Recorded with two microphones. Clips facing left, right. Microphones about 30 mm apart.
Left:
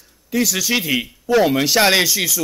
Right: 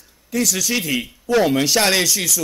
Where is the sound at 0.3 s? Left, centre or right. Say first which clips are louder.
Left 2 dB; centre.